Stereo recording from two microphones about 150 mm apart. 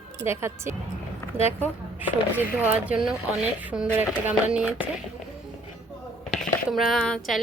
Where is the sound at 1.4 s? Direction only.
45° left (ahead or behind).